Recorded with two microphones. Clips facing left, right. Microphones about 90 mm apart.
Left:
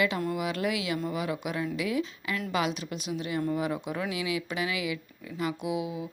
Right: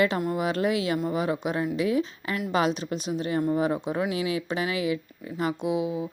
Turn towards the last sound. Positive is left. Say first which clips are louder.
# right 5 dB
turn(degrees=-30)  # may be behind; listen again after turning